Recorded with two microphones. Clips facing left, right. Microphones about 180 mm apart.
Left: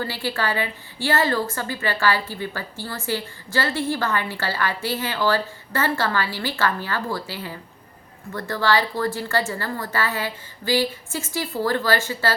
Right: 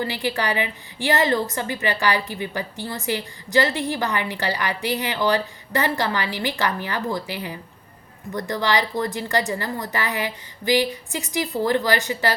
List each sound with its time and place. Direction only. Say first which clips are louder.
0.0 s a woman's voice: right 1 dB; 15° right (ahead or behind)